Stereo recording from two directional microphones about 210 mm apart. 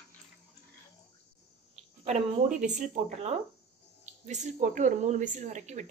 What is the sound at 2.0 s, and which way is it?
Speech, 35° right (ahead or behind).